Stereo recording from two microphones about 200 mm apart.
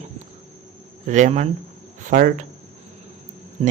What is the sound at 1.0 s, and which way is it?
Speech, 35° right (ahead or behind).